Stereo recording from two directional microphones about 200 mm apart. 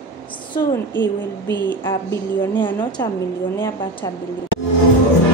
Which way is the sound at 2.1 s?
10° left (ahead or behind).